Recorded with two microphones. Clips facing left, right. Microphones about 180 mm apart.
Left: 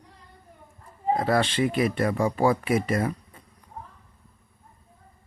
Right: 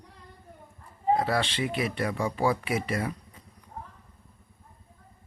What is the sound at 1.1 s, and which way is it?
Speech, 45° left (ahead or behind).